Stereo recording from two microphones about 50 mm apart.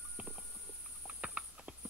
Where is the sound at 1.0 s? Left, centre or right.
Right.